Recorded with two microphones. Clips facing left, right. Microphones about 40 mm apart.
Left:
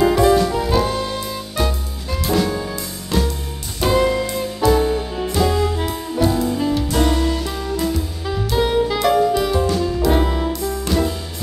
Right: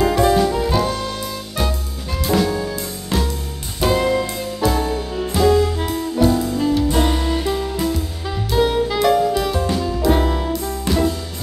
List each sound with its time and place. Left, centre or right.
0.0 s music: centre
3.8 s music: centre
6.9 s music: centre
7.8 s music: centre